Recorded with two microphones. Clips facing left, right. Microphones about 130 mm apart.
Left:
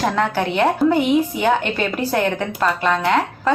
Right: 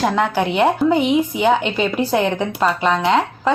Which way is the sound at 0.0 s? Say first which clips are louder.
Right 2 dB; 15° right (ahead or behind).